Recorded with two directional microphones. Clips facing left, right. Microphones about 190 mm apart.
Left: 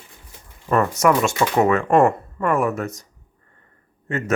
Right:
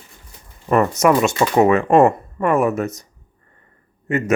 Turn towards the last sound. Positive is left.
turn(degrees=-15)  # may be behind; listen again after turning